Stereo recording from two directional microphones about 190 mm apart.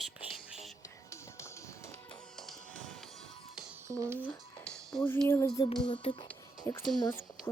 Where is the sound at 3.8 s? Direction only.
15° right (ahead or behind).